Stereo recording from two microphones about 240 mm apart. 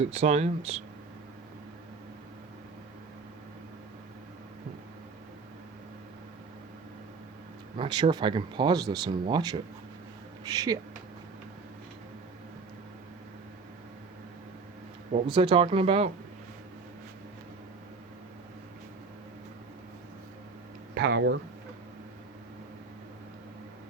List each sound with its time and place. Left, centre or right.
0.0 s speech: right
7.8 s speech: right
15.1 s speech: right
20.9 s speech: right